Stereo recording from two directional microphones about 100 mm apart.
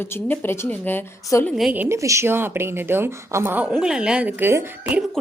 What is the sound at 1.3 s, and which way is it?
Speech, 30° left (ahead or behind).